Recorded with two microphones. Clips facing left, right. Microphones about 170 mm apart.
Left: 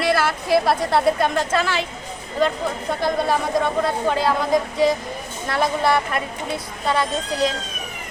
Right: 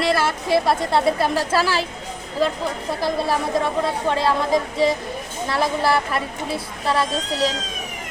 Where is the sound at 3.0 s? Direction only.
Centre (ahead or behind).